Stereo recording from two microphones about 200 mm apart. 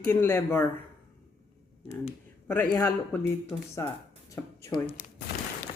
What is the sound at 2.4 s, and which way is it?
A man's voice, 10° left (ahead or behind).